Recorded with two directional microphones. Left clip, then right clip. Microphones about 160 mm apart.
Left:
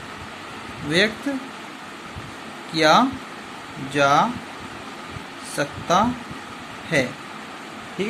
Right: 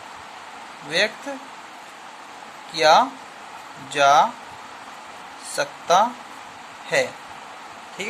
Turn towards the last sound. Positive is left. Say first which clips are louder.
# even
turn(degrees=-25)  # may be behind; listen again after turning